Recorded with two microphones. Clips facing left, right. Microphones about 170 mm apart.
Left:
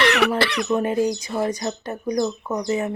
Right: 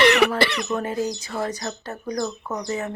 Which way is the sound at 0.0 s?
Centre (ahead or behind).